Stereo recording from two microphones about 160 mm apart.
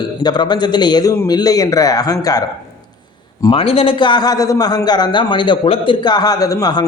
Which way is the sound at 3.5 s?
35° left (ahead or behind).